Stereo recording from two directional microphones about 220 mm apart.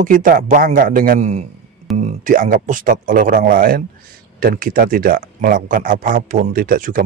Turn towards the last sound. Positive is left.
turn(degrees=-35)  # may be behind; listen again after turning